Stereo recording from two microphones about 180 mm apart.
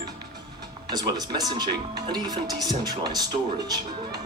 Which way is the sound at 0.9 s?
20° right (ahead or behind).